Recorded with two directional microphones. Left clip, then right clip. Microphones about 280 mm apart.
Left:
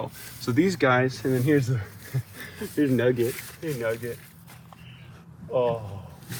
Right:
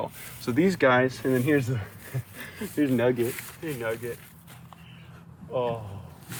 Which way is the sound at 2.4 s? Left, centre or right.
Centre.